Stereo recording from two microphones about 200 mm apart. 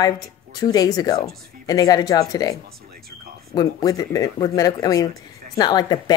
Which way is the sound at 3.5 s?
15° left (ahead or behind).